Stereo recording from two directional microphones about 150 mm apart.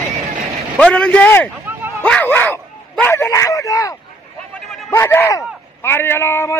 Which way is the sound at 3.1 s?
20° left (ahead or behind).